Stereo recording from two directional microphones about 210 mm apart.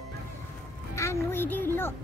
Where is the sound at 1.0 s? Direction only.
10° left (ahead or behind).